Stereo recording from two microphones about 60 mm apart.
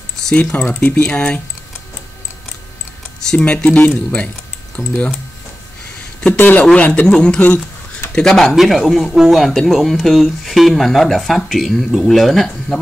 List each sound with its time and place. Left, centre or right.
0.2 s speech: centre
3.5 s speech: centre
6.3 s speech: left
6.6 s speech: left
8.1 s speech: centre